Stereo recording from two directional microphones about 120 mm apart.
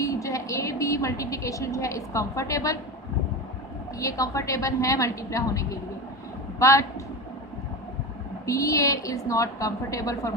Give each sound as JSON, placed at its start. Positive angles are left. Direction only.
{"t": 0.0, "sound": "a woman's voice", "side_deg": 25}
{"t": 4.0, "sound": "a woman's voice", "side_deg": 25}
{"t": 8.4, "sound": "a woman's voice", "side_deg": 25}